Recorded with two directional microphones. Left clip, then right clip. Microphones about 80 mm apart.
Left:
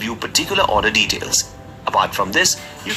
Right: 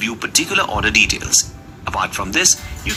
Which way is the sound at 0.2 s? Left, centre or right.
Centre.